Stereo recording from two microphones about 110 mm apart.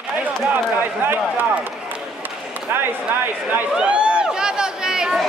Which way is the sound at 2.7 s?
20° right (ahead or behind).